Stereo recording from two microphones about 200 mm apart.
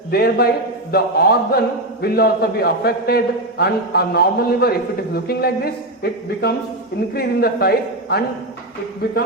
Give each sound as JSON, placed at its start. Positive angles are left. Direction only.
{"t": 0.1, "sound": "speech", "side_deg": 50}